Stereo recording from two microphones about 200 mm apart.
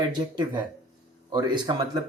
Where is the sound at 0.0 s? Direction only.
20° right (ahead or behind).